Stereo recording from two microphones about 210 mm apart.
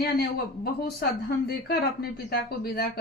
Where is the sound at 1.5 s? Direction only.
50° left (ahead or behind).